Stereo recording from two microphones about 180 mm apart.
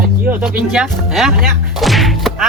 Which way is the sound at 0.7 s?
Centre (ahead or behind).